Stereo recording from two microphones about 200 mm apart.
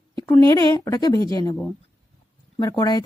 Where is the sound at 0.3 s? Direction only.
15° left (ahead or behind).